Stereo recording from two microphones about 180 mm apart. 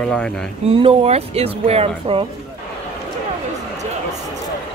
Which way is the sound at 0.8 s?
30° right (ahead or behind).